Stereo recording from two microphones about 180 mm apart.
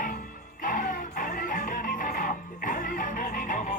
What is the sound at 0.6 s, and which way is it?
Music, 50° left (ahead or behind).